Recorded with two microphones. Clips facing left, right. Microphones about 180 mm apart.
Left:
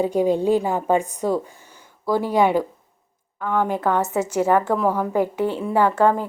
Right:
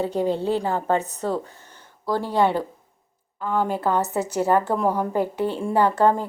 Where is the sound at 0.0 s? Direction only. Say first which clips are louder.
Left 4 dB; 10° left (ahead or behind).